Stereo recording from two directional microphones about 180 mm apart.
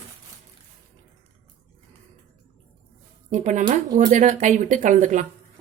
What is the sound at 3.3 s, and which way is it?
Speech, 40° right (ahead or behind).